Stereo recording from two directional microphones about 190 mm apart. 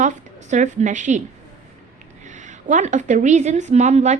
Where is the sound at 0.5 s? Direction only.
40° right (ahead or behind).